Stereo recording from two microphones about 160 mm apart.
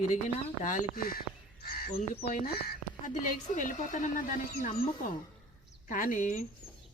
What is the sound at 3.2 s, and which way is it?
Speech, 55° left (ahead or behind).